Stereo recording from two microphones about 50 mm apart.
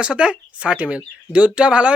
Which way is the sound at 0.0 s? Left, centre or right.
Centre.